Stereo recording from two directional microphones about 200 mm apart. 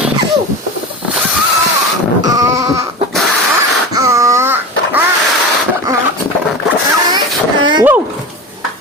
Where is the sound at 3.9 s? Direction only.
15° right (ahead or behind).